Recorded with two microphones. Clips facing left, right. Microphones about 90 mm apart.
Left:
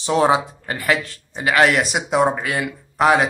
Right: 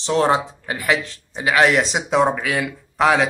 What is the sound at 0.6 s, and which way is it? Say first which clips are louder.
Speech: even; 10° right (ahead or behind).